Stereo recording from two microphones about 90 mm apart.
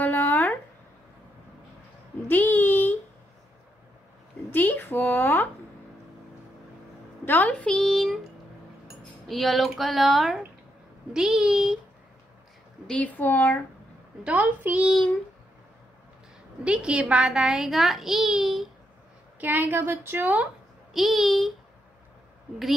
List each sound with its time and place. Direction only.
0.0 s a sound: 20° left (ahead or behind)
2.2 s a sound: 20° left (ahead or behind)
4.5 s speech: 25° left (ahead or behind)
7.2 s speech: 20° left (ahead or behind); by 8.2 s centre (ahead or behind)
9.3 s a child's voice: centre (ahead or behind)
12.8 s speech: 15° left (ahead or behind)
14.2 s a woman's voice: 20° right (ahead or behind)
16.6 s a child's voice: 10° right (ahead or behind)
19.4 s a woman's voice: 20° right (ahead or behind)
20.9 s a child's voice: centre (ahead or behind)